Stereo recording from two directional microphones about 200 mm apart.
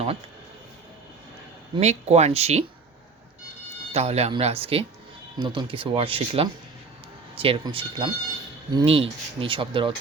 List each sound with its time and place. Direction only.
1.7 s speech: 35° right (ahead or behind)
3.9 s speech: 30° right (ahead or behind)